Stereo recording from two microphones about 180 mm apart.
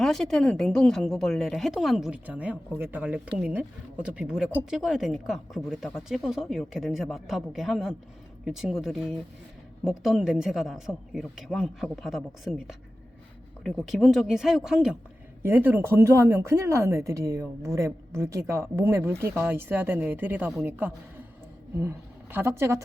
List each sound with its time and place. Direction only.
0.0 s a woman's voice: centre (ahead or behind); by 22.8 s 15° right (ahead or behind)